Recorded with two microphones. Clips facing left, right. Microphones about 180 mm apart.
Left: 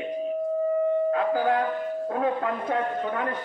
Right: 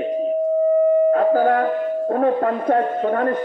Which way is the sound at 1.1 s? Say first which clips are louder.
Right 7 dB; 45° right (ahead or behind).